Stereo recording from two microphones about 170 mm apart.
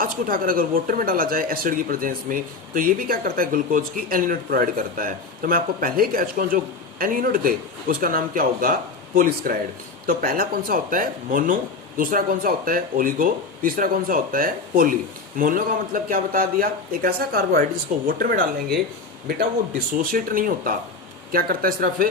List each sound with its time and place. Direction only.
0.0 s speech: 55° right (ahead or behind)
20.1 s speech: 55° right (ahead or behind)